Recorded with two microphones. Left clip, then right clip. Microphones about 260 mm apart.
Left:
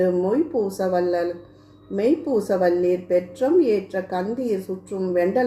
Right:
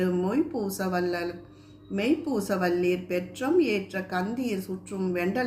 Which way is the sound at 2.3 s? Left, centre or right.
Right.